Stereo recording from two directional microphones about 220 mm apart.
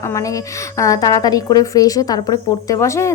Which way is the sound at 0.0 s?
15° left (ahead or behind).